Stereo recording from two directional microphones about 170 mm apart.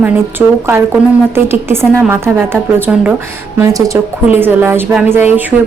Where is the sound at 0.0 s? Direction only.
10° right (ahead or behind).